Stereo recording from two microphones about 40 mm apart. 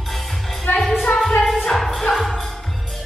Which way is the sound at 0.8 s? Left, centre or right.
Centre.